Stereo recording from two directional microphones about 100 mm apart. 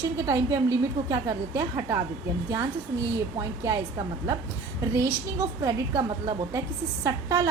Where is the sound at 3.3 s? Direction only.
30° right (ahead or behind).